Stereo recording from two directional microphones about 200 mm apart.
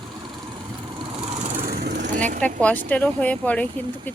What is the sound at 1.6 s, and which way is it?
Vehicle, 50° right (ahead or behind).